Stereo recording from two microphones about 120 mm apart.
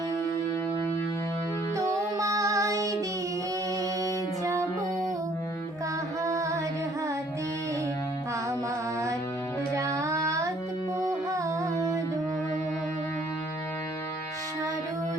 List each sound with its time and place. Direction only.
1.7 s music: 25° right (ahead or behind)
4.0 s music: 30° right (ahead or behind)
6.2 s music: 25° right (ahead or behind)
9.7 s child singing: 25° right (ahead or behind)
11.3 s music: 30° right (ahead or behind)